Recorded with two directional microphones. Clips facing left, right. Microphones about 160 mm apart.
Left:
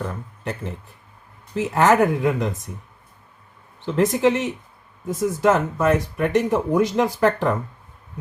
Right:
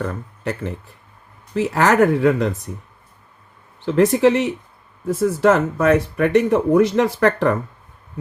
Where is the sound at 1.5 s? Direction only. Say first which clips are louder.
Right 1 dB; 85° right.